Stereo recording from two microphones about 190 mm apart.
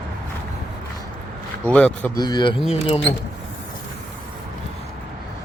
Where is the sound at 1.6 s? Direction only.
5° left (ahead or behind).